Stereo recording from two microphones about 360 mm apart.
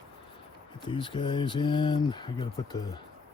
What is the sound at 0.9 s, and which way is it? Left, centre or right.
Speech, centre.